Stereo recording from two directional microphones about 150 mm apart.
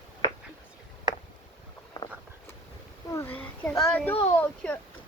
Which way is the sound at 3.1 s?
10° left (ahead or behind).